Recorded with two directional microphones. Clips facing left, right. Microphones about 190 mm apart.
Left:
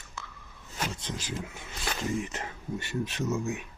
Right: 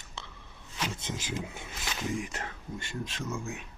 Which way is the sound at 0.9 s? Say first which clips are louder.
Even; 20° right (ahead or behind).